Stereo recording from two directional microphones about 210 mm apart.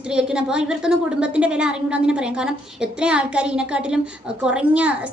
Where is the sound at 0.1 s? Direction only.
5° right (ahead or behind).